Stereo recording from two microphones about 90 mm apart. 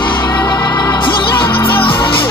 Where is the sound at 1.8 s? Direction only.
70° left (ahead or behind).